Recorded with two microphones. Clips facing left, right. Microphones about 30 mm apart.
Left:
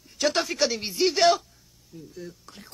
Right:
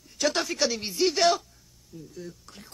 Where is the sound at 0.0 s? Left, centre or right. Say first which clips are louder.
Left 2 dB; centre.